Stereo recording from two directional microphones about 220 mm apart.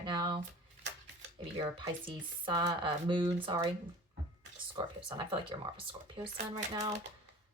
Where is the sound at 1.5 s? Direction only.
20° right (ahead or behind).